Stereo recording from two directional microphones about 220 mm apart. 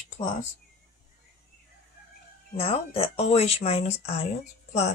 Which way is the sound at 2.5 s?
25° left (ahead or behind).